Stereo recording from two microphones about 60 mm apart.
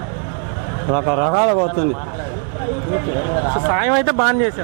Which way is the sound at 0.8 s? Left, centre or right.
Right.